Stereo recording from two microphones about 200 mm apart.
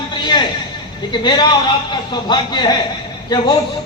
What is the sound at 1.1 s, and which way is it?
A man's voice, 20° left (ahead or behind).